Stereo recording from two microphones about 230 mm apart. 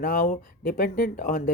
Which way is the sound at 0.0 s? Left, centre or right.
Left.